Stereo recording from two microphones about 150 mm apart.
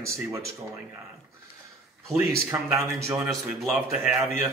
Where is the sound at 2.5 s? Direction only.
15° right (ahead or behind).